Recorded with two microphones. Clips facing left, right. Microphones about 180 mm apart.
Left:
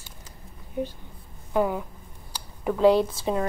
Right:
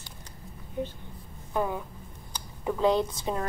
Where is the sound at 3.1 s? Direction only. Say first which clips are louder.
Left 5 dB; 25° left (ahead or behind).